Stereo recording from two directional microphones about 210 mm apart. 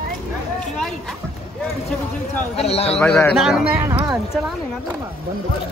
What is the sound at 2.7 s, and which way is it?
Speech, 30° left (ahead or behind).